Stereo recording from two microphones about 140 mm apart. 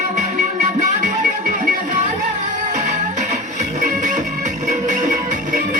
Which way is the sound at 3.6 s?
60° right (ahead or behind).